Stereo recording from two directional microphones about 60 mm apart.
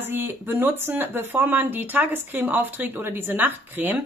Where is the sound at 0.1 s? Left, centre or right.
Right.